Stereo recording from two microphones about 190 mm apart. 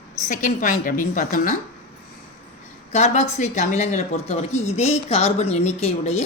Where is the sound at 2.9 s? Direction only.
35° left (ahead or behind).